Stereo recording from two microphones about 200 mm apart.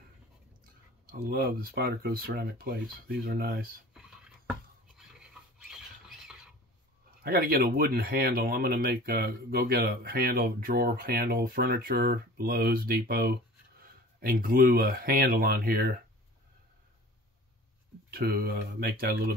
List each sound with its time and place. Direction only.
1.2 s speech: 50° right (ahead or behind)
5.6 s rodents: centre (ahead or behind)
7.2 s speech: 50° right (ahead or behind)
18.1 s speech: 50° right (ahead or behind)